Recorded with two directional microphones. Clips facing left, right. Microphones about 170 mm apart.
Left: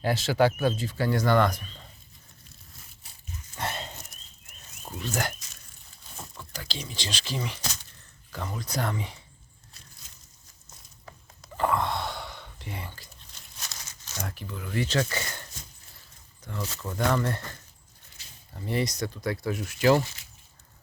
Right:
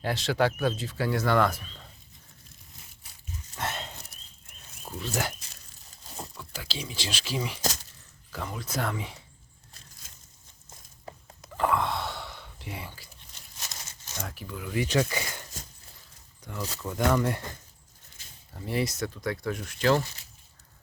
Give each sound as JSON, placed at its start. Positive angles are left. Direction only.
{"t": 0.0, "sound": "speech", "side_deg": 5}
{"t": 3.6, "sound": "a sound", "side_deg": 0}
{"t": 6.5, "sound": "speech", "side_deg": -5}
{"t": 11.5, "sound": "gasp", "side_deg": 0}
{"t": 14.2, "sound": "speech", "side_deg": 0}
{"t": 16.5, "sound": "speech", "side_deg": -10}
{"t": 18.2, "sound": "a sound", "side_deg": -50}
{"t": 18.5, "sound": "speech", "side_deg": 0}